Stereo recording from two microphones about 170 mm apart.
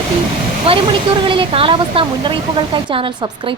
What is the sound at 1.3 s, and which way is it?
Speech, 30° right (ahead or behind).